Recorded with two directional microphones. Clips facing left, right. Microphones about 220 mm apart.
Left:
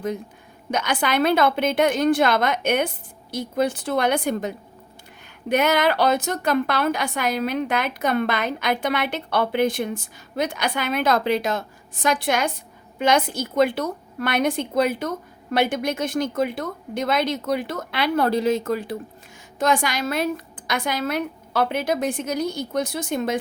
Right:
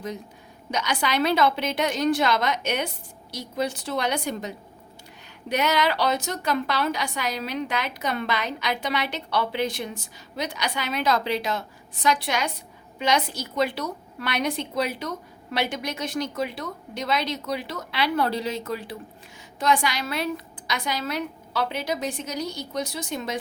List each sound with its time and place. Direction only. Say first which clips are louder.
0.7 s a woman's voice: left 3 dB; 55° left (ahead or behind)